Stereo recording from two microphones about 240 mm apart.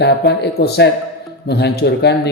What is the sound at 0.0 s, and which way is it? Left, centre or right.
A man's voice, left.